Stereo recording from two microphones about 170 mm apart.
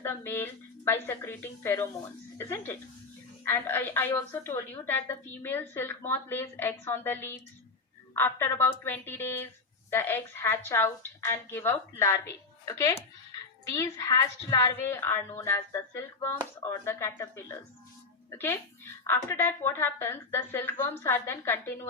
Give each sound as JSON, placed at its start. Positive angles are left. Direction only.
{"t": 0.0, "sound": "a woman's voice", "side_deg": 15}